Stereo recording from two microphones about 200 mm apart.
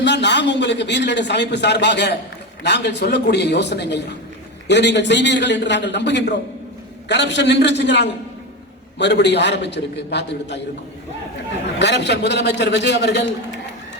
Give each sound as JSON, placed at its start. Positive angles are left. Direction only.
{"t": 0.0, "sound": "a man's voice", "side_deg": 60}
{"t": 11.8, "sound": "a man's voice", "side_deg": 60}